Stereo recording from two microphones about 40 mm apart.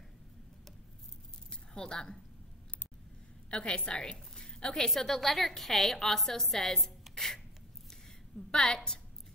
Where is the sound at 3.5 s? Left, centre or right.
Left.